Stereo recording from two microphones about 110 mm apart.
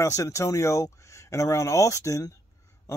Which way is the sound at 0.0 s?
30° left (ahead or behind).